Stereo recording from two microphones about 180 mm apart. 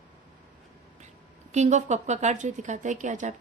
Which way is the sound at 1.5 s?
40° right (ahead or behind).